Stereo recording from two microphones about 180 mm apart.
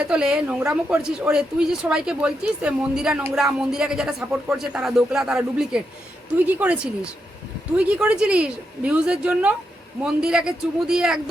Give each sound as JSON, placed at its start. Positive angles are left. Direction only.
{"t": 0.0, "sound": "a woman's voice", "side_deg": -5}